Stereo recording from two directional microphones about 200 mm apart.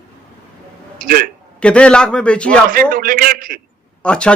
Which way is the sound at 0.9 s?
45° right (ahead or behind).